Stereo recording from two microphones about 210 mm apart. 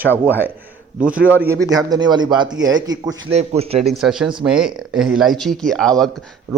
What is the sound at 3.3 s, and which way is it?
Speech, 30° right (ahead or behind).